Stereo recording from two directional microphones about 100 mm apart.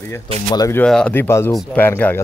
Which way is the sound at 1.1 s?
25° left (ahead or behind).